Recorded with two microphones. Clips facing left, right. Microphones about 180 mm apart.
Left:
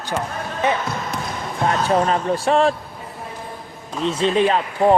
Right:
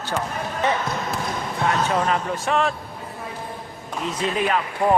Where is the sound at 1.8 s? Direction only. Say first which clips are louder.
Left 4 dB; 35° left (ahead or behind).